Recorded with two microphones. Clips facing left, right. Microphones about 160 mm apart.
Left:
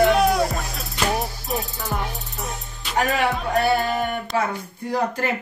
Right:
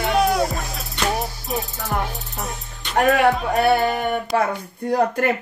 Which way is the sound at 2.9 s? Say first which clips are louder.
Right 5 dB; 60° right (ahead or behind).